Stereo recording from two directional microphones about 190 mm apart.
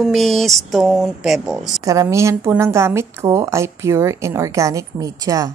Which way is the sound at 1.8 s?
20° right (ahead or behind).